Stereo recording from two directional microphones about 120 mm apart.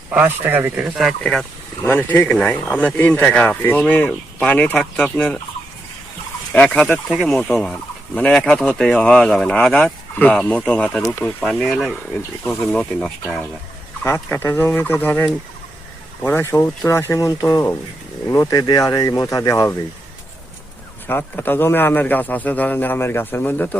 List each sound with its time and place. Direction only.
0.1 s speech: 15° right (ahead or behind); by 1.5 s centre (ahead or behind)
1.8 s speech: 15° left (ahead or behind)
6.5 s speech: 15° left (ahead or behind)
7.1 s speech: 5° right (ahead or behind); by 11.0 s 10° left (ahead or behind)
11.4 s speech: centre (ahead or behind)
12.6 s speech: 10° left (ahead or behind)
14.0 s speech: 20° left (ahead or behind)
21.1 s speech: 15° left (ahead or behind)